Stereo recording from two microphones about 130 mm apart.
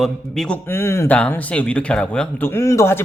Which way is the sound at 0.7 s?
20° left (ahead or behind).